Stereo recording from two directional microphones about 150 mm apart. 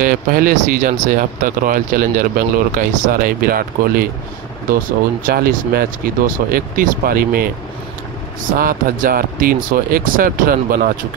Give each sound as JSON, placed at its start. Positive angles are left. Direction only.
{"t": 0.0, "sound": "speech", "side_deg": -70}
{"t": 5.2, "sound": "speech", "side_deg": -80}
{"t": 8.5, "sound": "speech", "side_deg": -70}